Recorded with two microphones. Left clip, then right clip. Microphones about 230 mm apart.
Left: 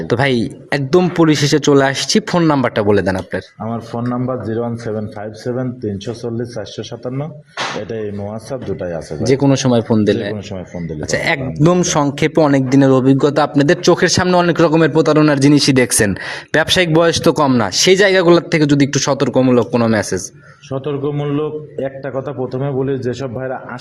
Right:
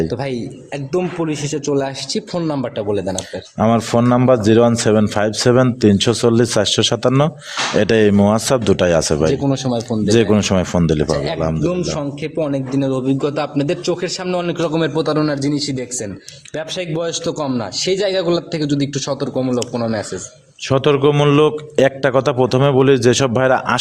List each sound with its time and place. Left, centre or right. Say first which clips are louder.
0.1 s speech: left 8 dB; left
3.6 s a man's voice: right 9 dB; right
9.2 s speech: left 3 dB; left
10.3 s a man's voice: right 11 dB; right
11.1 s speech: left 2 dB; left
20.7 s a man's voice: right 7 dB; right